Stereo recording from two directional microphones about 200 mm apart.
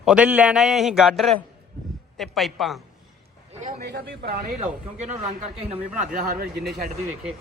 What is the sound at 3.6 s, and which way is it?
Speech, 50° right (ahead or behind).